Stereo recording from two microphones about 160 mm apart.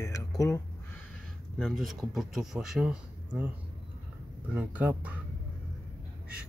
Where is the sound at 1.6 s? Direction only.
Centre (ahead or behind).